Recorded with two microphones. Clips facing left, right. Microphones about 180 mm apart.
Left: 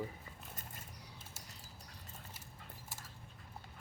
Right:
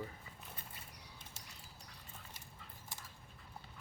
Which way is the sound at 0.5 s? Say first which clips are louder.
Left 2 dB; 45° left (ahead or behind).